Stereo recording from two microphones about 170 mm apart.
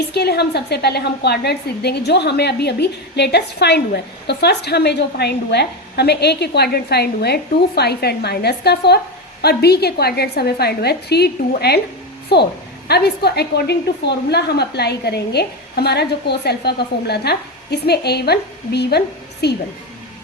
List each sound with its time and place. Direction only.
0.1 s a woman's voice: 75° left (ahead or behind)